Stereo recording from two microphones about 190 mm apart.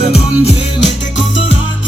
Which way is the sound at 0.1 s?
35° left (ahead or behind).